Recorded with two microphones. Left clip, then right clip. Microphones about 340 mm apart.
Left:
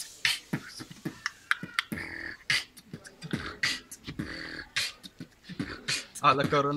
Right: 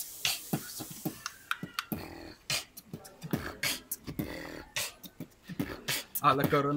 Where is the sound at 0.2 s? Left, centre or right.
Centre.